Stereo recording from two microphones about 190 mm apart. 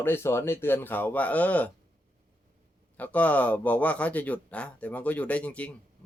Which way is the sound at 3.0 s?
10° left (ahead or behind).